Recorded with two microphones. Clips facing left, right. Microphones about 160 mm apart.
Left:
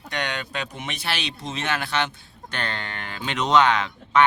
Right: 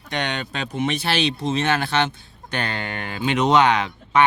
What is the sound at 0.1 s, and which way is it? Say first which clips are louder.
Speech: right 3 dB; 25° right (ahead or behind).